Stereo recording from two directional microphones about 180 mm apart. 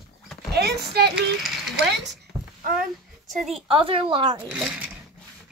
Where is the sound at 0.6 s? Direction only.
65° right (ahead or behind).